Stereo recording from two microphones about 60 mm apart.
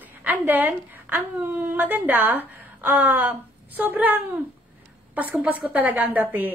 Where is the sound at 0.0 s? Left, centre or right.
Right.